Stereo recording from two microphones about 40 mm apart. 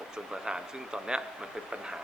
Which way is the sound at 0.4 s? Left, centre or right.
Centre.